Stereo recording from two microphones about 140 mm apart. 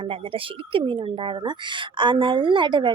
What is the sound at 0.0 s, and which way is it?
Speech, 40° right (ahead or behind).